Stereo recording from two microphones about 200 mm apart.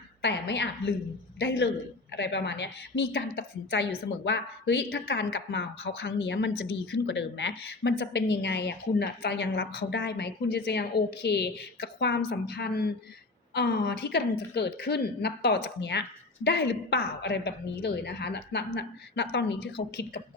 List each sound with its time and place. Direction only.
0.2 s a woman's voice: 60° left (ahead or behind)